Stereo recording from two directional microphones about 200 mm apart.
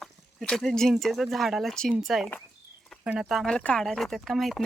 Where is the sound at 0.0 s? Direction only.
Centre (ahead or behind).